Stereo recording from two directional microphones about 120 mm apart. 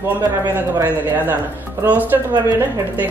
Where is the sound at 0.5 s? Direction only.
15° right (ahead or behind).